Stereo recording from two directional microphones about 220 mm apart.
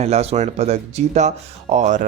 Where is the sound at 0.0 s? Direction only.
30° right (ahead or behind).